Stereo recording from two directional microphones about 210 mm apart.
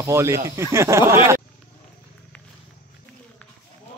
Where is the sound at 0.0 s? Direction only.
15° right (ahead or behind).